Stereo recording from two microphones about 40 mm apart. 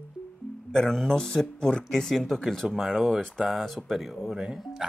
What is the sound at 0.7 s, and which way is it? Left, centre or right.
Speech, centre.